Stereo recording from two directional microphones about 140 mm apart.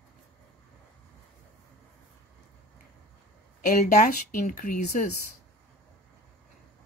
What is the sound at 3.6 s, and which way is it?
Speech, 80° left.